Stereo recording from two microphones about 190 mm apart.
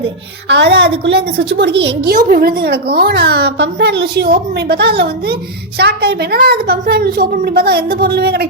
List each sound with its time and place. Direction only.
0.4 s a woman's voice: 65° right (ahead or behind)